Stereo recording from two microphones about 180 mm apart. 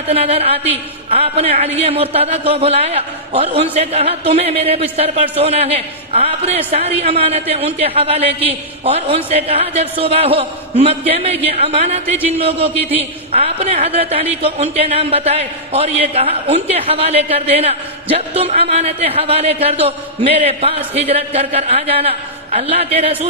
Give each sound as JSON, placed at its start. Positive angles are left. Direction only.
{"t": 0.1, "sound": "a man's voice", "side_deg": -35}